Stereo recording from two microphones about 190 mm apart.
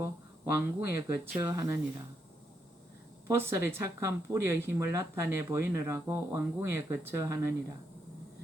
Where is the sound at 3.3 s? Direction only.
15° right (ahead or behind).